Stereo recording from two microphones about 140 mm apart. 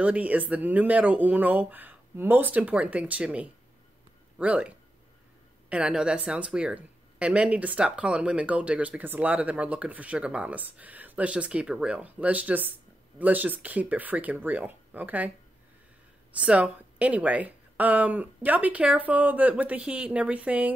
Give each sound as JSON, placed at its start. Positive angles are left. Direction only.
{"t": 0.0, "sound": "speech", "side_deg": -10}
{"t": 16.3, "sound": "speech", "side_deg": -10}